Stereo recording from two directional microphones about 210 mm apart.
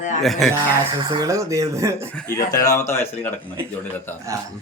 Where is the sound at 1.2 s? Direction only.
15° right (ahead or behind).